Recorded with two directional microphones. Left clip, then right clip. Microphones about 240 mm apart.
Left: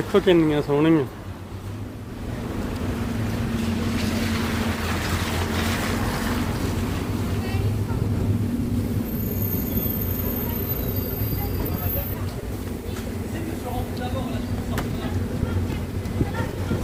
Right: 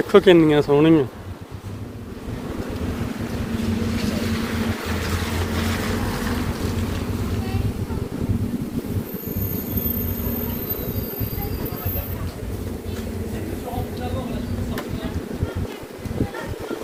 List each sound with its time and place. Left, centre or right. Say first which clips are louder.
0.1 s speech: right 5 dB; right